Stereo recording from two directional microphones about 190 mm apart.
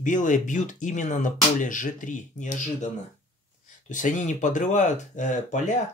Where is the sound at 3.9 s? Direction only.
40° left (ahead or behind).